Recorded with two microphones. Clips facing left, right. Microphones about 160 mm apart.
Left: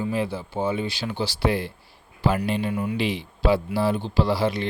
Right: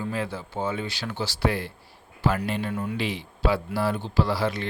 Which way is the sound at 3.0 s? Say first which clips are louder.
Left 3 dB; 15° left (ahead or behind).